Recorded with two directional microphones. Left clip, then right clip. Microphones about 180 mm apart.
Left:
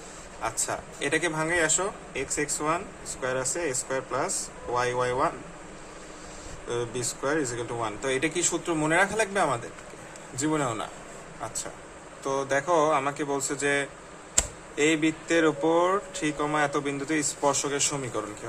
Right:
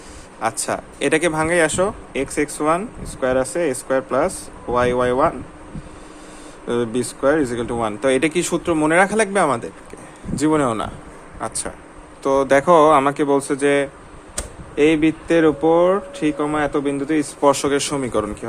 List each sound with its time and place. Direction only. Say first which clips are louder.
0.4 s speech: right 9 dB; 45° right (ahead or behind)
6.7 s speech: right 9 dB; 45° right (ahead or behind); by 17.5 s 30° right (ahead or behind)
17.5 s speech: right 9 dB; 45° right (ahead or behind)